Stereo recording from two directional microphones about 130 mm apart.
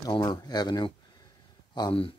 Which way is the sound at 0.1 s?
35° left (ahead or behind).